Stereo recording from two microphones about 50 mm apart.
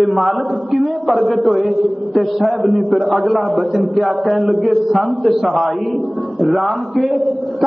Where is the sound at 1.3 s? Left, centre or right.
Centre.